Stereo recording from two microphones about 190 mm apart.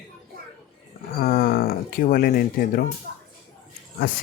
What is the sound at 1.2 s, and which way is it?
Speech, 50° left (ahead or behind).